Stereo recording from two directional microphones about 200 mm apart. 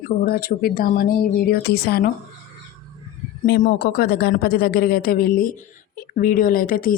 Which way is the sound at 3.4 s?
45° left (ahead or behind).